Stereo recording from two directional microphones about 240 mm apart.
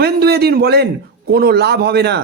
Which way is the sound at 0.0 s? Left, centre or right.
Right.